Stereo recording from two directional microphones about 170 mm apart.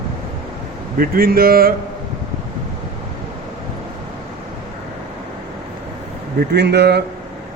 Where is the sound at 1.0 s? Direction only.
60° right (ahead or behind).